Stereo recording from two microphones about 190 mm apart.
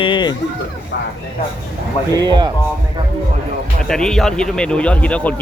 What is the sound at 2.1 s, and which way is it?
Speech, 20° right (ahead or behind).